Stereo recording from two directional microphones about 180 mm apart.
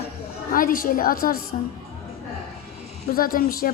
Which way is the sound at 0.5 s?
50° left (ahead or behind).